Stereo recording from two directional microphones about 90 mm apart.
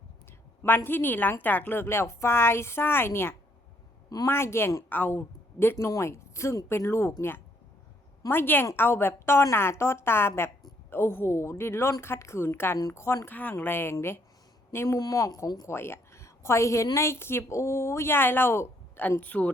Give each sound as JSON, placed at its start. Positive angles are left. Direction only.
{"t": 0.6, "sound": "a woman's voice", "side_deg": 25}
{"t": 5.7, "sound": "a woman's voice", "side_deg": 35}
{"t": 15.6, "sound": "a woman's voice", "side_deg": 30}